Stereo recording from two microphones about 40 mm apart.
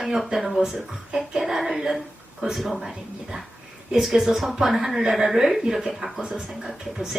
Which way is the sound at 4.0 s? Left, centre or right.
Centre.